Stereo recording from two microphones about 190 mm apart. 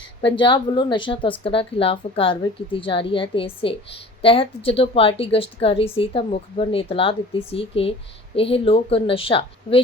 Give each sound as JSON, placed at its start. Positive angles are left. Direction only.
{"t": 0.2, "sound": "a woman's voice", "side_deg": 25}